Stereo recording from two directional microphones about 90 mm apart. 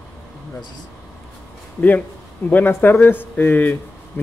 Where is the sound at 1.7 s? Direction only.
20° left (ahead or behind).